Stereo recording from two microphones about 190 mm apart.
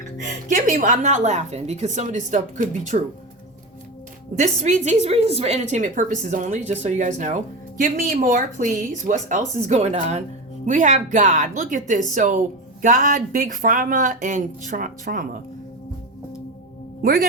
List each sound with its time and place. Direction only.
0.2 s a woman's voice: 40° right (ahead or behind)
4.4 s a woman's voice: 40° right (ahead or behind)
17.0 s a man's voice: 50° right (ahead or behind)